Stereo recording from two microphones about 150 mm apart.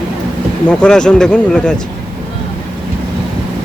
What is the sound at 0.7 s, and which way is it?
Speech, 5° left (ahead or behind).